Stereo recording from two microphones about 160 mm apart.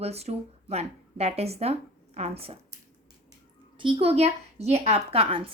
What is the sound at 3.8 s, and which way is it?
Speech, 35° right (ahead or behind).